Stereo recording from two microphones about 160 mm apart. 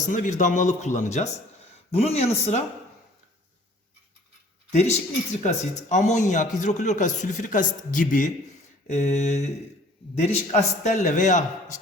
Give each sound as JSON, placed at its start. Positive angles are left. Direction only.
{"t": 0.1, "sound": "speech", "side_deg": 50}
{"t": 4.7, "sound": "speech", "side_deg": 45}
{"t": 8.9, "sound": "speech", "side_deg": 45}